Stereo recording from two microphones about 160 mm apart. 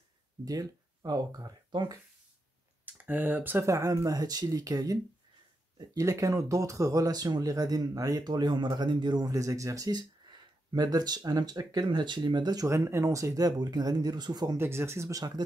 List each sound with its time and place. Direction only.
0.5 s speech: 25° right (ahead or behind)
2.8 s speech: 10° right (ahead or behind)
14.6 s speech: 15° right (ahead or behind)